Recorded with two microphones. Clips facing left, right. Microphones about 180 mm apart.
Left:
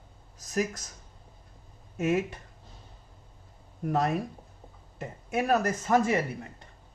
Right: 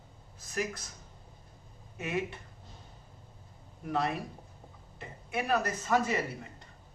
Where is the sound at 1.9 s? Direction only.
45° left (ahead or behind).